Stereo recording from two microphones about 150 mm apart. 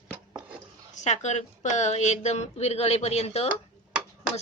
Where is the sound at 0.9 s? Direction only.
50° left (ahead or behind).